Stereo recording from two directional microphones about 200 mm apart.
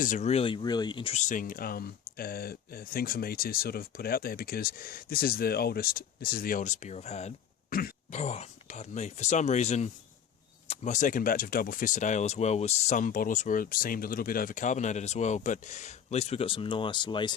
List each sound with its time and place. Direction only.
0.0 s speech: 35° left (ahead or behind)